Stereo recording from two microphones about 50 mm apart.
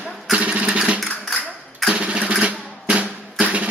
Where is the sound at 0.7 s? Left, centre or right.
Centre.